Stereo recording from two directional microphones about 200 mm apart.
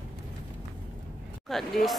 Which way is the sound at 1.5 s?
Centre (ahead or behind).